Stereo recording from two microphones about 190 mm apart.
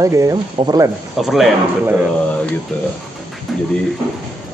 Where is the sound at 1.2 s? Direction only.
Centre (ahead or behind).